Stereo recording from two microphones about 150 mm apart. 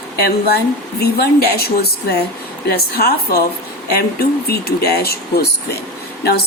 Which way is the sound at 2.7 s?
90° left.